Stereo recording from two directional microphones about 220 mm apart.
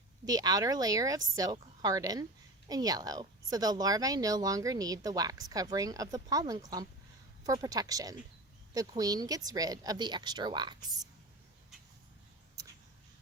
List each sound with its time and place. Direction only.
0.3 s speech: 15° right (ahead or behind)